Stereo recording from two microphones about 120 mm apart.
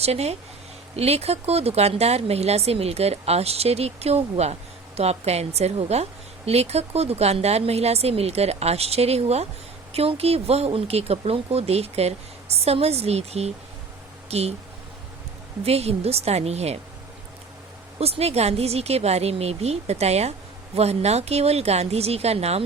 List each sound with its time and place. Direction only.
0.0 s a woman's voice: 60° right (ahead or behind)
15.6 s a woman's voice: 60° right (ahead or behind)
18.0 s a woman's voice: 60° right (ahead or behind)